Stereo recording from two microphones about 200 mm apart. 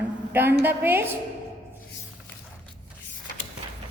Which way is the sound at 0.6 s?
10° right (ahead or behind).